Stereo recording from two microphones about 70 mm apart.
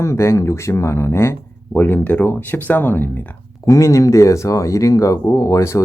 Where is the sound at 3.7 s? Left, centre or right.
Left.